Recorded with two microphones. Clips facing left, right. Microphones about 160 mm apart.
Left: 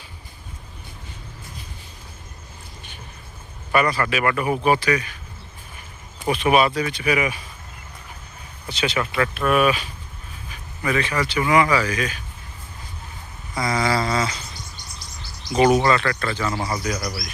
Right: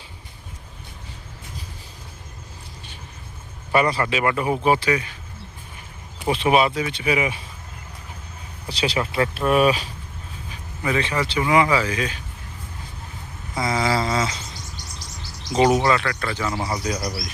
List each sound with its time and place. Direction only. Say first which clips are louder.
3.7 s speech: even; 25° right (ahead or behind)
6.2 s speech: even; 25° right (ahead or behind)
8.7 s speech: even; 35° right (ahead or behind)
13.6 s speech: even; 25° right (ahead or behind)
15.5 s speech: left 1 dB; 20° right (ahead or behind)
15.8 s speech: left 1 dB; 10° right (ahead or behind); by 17.3 s 30° right (ahead or behind)